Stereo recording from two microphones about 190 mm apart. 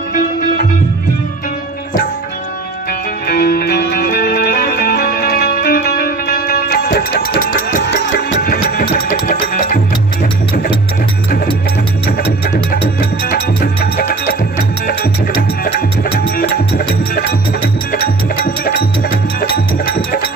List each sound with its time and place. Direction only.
3.3 s music: 55° left (ahead or behind)
6.9 s a sound: 55° left (ahead or behind)
8.3 s music: 55° left (ahead or behind)
13.2 s music: 55° left (ahead or behind)